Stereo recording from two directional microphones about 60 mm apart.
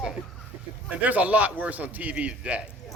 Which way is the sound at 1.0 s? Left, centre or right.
Right.